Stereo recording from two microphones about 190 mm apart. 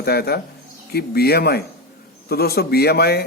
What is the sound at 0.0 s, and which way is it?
Speech, 55° left (ahead or behind).